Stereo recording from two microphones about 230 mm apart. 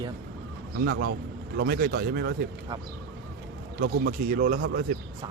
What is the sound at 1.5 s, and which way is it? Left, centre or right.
Speech, right.